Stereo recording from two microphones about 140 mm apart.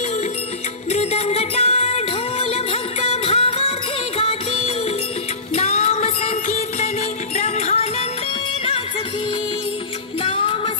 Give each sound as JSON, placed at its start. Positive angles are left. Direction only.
{"t": 0.8, "sound": "music", "side_deg": 50}
{"t": 10.2, "sound": "music", "side_deg": 40}